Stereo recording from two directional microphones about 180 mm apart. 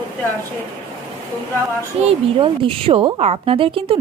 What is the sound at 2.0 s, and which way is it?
A woman's voice, 30° right (ahead or behind).